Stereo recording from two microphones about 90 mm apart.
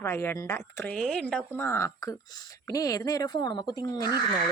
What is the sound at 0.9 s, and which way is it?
Speech, 10° left (ahead or behind).